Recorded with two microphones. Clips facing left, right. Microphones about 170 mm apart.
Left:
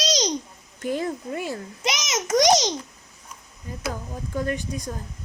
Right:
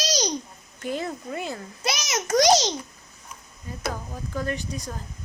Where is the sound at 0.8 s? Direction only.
50° left (ahead or behind).